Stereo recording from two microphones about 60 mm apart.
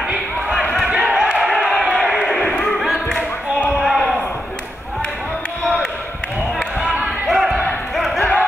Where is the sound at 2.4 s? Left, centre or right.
Left.